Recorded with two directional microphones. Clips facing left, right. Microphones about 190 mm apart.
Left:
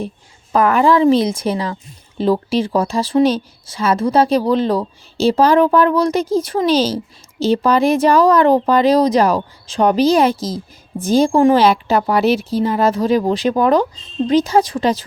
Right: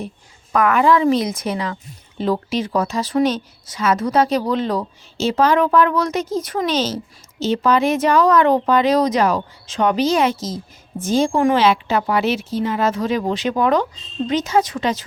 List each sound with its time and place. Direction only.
0.5 s speech: 30° left (ahead or behind)